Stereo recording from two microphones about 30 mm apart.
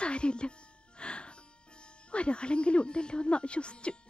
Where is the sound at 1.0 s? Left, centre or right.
Left.